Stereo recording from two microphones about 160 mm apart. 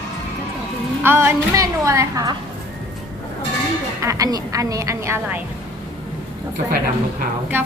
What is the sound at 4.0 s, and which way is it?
A woman's voice, 20° right (ahead or behind).